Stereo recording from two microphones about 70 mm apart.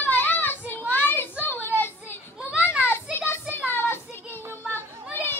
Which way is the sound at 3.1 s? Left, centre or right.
Left.